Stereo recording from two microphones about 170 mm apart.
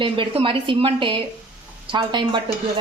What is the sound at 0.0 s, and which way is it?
A woman's voice, 30° right (ahead or behind).